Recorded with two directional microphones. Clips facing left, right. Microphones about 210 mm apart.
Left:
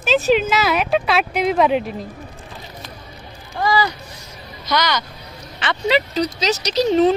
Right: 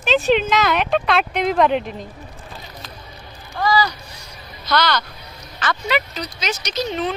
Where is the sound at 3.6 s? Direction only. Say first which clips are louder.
Even; 25° left (ahead or behind).